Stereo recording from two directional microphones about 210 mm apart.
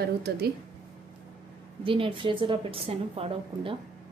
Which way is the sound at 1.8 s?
25° right (ahead or behind).